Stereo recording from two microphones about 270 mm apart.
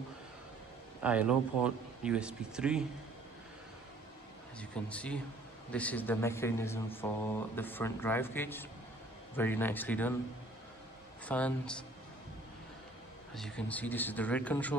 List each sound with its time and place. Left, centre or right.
1.0 s speech: centre
4.6 s a man's voice: centre
11.2 s speech: centre
13.3 s speech: centre